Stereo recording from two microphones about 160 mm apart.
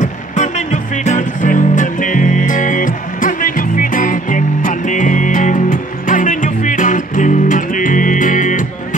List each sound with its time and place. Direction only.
0.0 s music: 50° left (ahead or behind)